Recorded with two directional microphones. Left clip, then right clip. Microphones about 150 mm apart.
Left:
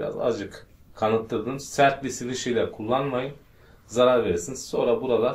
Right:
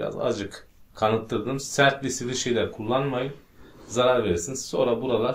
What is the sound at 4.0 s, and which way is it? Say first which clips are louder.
Speech: left 2 dB; 40° right (ahead or behind).